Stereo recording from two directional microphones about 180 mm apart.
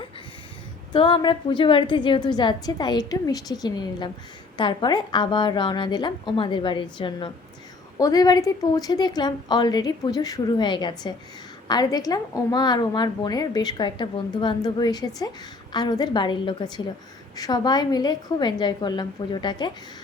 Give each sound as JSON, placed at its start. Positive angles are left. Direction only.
{"t": 0.9, "sound": "a woman's voice", "side_deg": 25}